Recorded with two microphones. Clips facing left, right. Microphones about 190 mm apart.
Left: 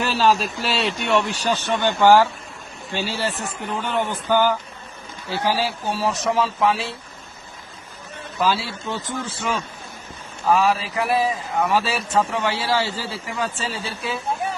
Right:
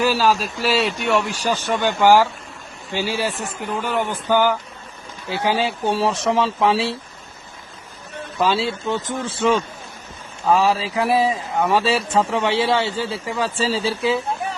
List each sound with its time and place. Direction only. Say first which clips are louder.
0.0 s a man's voice: right 1 dB; 5° right (ahead or behind); by 6.8 s 25° right (ahead or behind)
8.4 s a man's voice: right 3 dB; 25° right (ahead or behind)